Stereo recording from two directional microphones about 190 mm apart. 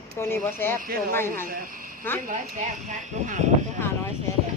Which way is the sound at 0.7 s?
50° right (ahead or behind).